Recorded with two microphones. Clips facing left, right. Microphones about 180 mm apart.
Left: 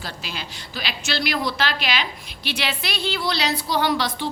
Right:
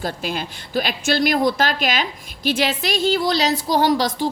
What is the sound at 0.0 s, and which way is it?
A woman's voice, 50° right (ahead or behind).